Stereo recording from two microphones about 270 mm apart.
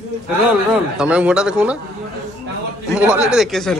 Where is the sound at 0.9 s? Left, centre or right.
Centre.